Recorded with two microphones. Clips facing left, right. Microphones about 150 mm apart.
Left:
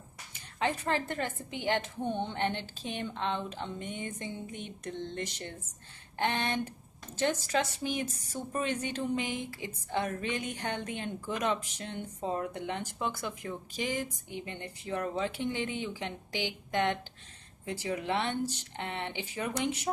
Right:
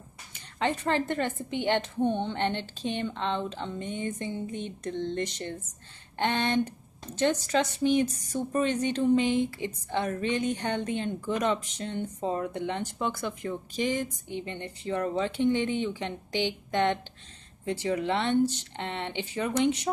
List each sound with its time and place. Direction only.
0.3 s a woman's voice: 5° left (ahead or behind)